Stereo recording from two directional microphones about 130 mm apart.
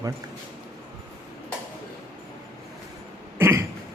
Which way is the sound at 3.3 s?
20° right (ahead or behind).